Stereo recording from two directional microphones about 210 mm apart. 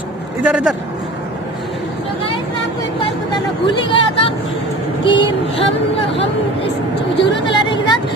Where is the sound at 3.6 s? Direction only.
25° left (ahead or behind).